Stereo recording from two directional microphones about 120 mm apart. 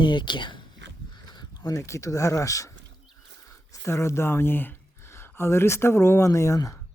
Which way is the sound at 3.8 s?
25° left (ahead or behind).